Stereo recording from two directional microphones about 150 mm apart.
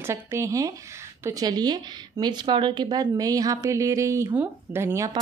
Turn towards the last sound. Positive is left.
turn(degrees=-20)  # may be behind; listen again after turning